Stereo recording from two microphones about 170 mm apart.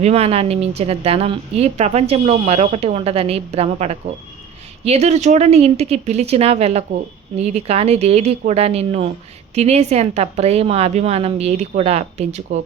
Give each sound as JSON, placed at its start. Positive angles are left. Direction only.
{"t": 0.0, "sound": "speech", "side_deg": -35}